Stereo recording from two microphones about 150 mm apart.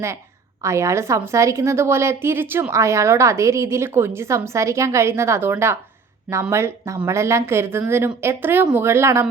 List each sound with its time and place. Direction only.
0.6 s a woman's voice: 20° right (ahead or behind)